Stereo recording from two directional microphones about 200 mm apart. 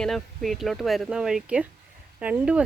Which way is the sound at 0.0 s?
Centre (ahead or behind).